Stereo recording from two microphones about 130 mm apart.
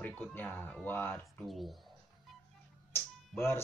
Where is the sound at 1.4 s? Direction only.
Centre (ahead or behind).